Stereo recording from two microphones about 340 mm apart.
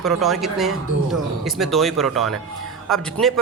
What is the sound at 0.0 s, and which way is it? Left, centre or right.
A man's voice, centre.